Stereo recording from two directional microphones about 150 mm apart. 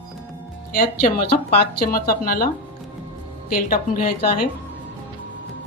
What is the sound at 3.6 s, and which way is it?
Speech, 75° left (ahead or behind).